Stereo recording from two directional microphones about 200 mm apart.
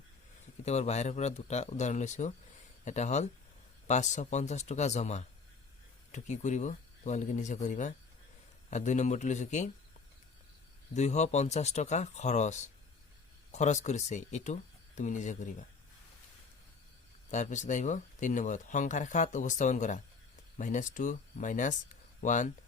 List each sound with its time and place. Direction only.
0.6 s speech: 35° left (ahead or behind)
10.9 s speech: 35° left (ahead or behind)
17.3 s speech: 35° left (ahead or behind)